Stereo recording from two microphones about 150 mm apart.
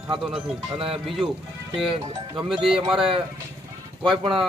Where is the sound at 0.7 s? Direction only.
35° right (ahead or behind).